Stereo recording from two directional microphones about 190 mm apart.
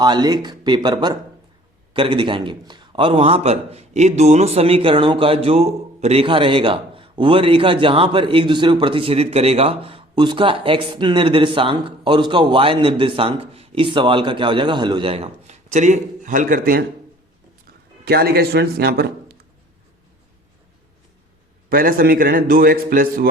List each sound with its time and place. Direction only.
0.0 s a man's voice: 20° right (ahead or behind); by 16.8 s 45° right (ahead or behind)
18.0 s a man's voice: 55° right (ahead or behind)
21.7 s a man's voice: 50° right (ahead or behind)